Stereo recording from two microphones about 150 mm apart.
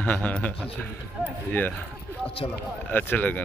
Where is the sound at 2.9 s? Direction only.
10° left (ahead or behind).